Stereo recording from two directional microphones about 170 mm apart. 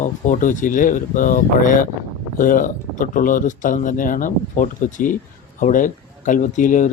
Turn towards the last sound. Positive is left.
turn(degrees=50)  # may be behind; listen again after turning